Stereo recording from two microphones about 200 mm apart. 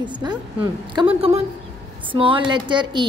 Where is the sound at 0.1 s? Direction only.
20° right (ahead or behind).